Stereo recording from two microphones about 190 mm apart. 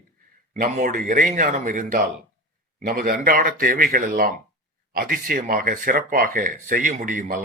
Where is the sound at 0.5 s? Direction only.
45° right (ahead or behind).